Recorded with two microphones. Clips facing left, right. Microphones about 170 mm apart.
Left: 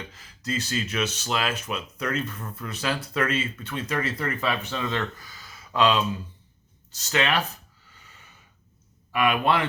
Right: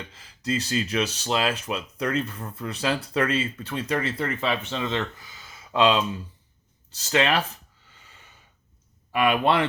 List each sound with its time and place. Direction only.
0.1 s speech: 30° right (ahead or behind)
9.1 s speech: 30° right (ahead or behind)